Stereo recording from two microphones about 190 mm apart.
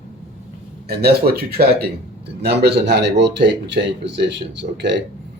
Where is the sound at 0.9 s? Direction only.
55° right (ahead or behind).